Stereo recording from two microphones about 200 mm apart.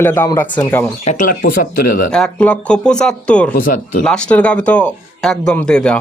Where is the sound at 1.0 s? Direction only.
40° left (ahead or behind).